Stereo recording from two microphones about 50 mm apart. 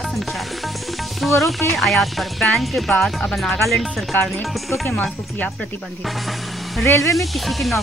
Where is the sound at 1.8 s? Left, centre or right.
Centre.